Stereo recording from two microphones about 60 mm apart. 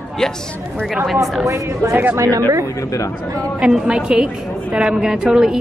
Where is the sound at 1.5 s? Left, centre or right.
Right.